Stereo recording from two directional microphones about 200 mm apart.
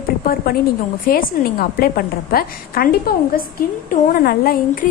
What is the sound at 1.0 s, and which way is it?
A woman's voice, 45° left (ahead or behind).